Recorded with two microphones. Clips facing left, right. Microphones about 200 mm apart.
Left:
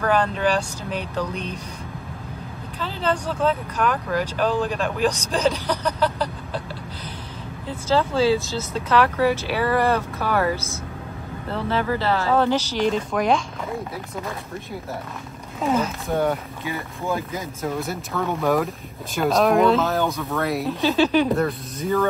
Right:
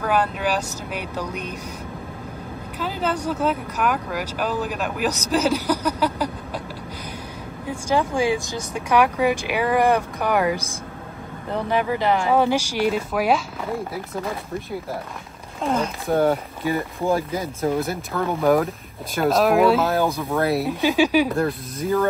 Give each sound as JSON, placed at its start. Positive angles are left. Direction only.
{"t": 0.0, "sound": "speech", "side_deg": -10}
{"t": 2.8, "sound": "speech", "side_deg": -10}
{"t": 7.6, "sound": "speech", "side_deg": -15}
{"t": 15.6, "sound": "speech", "side_deg": 5}
{"t": 17.0, "sound": "speech", "side_deg": -30}
{"t": 17.7, "sound": "speech", "side_deg": 0}
{"t": 20.0, "sound": "speech", "side_deg": -30}
{"t": 20.6, "sound": "speech", "side_deg": -10}